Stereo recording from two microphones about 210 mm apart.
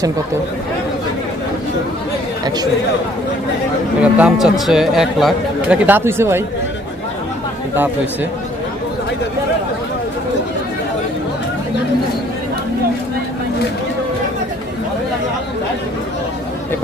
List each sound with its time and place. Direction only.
4.0 s speech: 5° right (ahead or behind)